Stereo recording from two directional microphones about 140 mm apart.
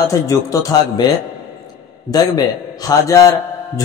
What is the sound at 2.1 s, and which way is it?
A man's voice, 25° left (ahead or behind).